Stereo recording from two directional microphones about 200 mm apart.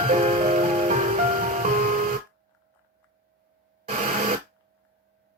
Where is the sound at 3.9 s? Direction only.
40° right (ahead or behind).